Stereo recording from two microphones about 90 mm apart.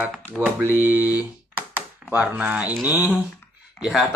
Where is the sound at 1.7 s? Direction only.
20° right (ahead or behind).